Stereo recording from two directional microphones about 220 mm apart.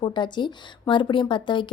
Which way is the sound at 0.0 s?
20° left (ahead or behind).